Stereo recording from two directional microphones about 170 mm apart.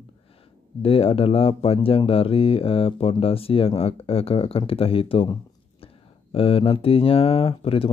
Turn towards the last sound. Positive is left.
turn(degrees=35)  # may be behind; listen again after turning